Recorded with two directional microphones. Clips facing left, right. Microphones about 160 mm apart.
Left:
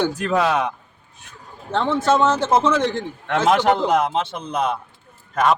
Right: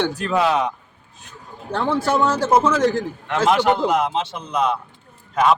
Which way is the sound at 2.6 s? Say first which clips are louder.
Right 2 dB; 5° right (ahead or behind).